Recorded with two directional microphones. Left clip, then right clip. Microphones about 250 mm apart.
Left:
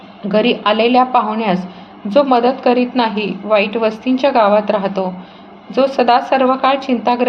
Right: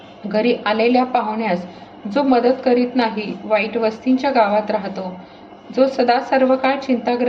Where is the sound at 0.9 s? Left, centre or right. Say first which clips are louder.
Left 5 dB; left.